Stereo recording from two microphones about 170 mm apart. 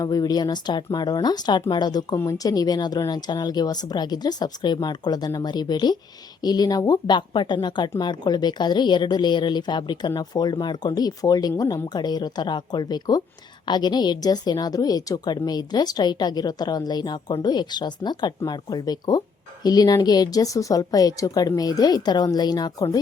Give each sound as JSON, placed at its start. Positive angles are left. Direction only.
{"t": 0.0, "sound": "a woman's voice", "side_deg": 20}